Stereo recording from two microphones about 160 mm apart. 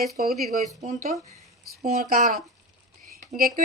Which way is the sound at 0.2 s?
60° right (ahead or behind).